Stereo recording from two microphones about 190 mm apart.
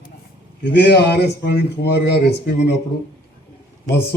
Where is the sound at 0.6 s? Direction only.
60° left (ahead or behind).